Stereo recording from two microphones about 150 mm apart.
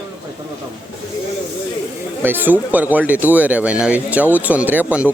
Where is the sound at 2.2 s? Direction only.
15° right (ahead or behind).